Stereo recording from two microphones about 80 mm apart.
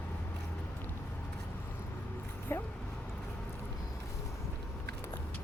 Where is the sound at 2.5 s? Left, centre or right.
Left.